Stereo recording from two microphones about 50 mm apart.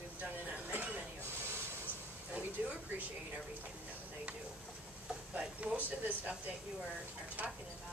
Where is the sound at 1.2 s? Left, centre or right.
Right.